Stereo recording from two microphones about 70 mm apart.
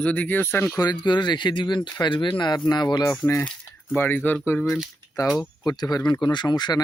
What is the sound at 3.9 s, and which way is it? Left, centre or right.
Speech, left.